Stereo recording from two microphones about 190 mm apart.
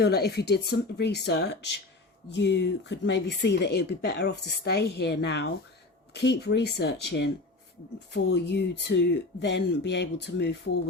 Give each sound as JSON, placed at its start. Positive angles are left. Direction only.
{"t": 0.0, "sound": "speech", "side_deg": 60}